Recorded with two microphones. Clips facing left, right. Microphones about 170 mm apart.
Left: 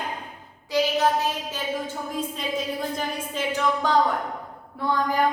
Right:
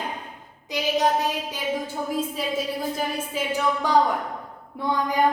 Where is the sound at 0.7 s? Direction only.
20° right (ahead or behind).